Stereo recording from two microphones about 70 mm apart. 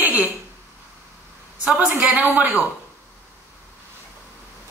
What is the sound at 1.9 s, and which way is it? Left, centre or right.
Speech, centre.